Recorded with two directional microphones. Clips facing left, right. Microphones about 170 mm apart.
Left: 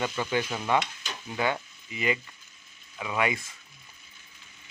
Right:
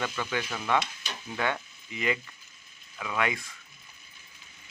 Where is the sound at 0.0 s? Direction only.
15° left (ahead or behind).